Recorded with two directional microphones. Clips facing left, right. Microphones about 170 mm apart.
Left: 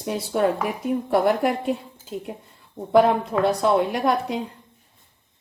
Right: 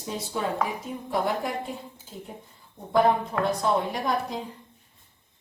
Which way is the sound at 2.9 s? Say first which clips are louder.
Left 5 dB; 75° left (ahead or behind).